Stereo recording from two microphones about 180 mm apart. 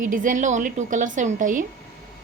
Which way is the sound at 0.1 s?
45° right (ahead or behind).